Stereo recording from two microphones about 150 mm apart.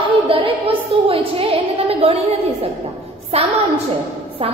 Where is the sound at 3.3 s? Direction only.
45° right (ahead or behind).